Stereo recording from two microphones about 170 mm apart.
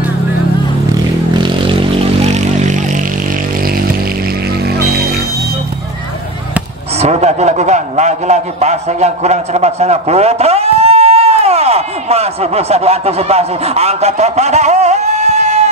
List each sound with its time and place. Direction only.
1.4 s vehicle: 30° right (ahead or behind)
7.0 s a man's voice: 40° right (ahead or behind)